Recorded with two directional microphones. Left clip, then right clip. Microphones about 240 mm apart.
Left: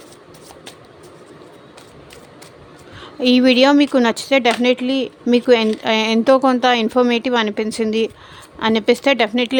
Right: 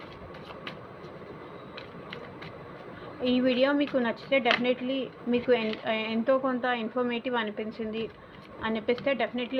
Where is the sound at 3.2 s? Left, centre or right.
Left.